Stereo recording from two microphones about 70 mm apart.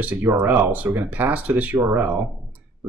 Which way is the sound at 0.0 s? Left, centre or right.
Right.